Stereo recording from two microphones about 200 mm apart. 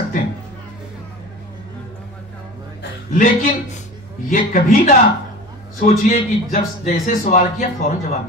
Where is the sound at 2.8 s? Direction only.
40° left (ahead or behind).